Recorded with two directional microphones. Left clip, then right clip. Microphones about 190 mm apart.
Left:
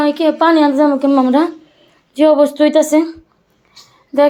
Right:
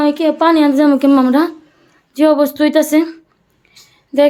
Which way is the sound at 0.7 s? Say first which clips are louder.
Right 1 dB; 35° right (ahead or behind).